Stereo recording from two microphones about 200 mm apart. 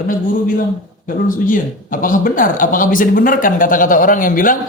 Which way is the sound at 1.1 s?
40° left (ahead or behind).